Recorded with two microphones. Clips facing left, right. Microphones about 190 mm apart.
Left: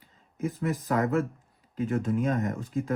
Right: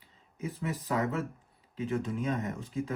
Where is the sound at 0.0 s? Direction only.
45° left (ahead or behind).